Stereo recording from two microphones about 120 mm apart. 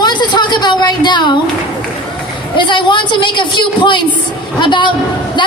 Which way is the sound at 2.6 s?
40° left (ahead or behind).